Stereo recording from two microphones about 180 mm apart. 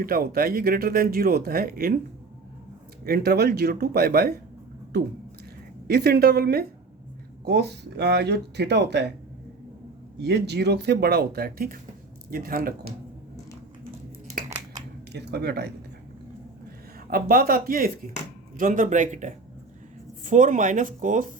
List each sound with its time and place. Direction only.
0.0 s speech: 55° right (ahead or behind)
3.0 s speech: 60° right (ahead or behind)
5.9 s speech: 60° right (ahead or behind)
10.2 s speech: 70° right (ahead or behind); by 12.7 s 55° right (ahead or behind)
15.1 s speech: 65° right (ahead or behind)
17.1 s speech: 55° right (ahead or behind)